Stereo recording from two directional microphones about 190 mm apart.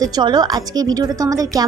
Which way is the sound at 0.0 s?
20° right (ahead or behind).